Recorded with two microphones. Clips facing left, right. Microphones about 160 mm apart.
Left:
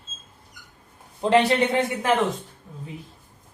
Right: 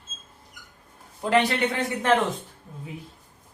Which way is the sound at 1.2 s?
25° left (ahead or behind).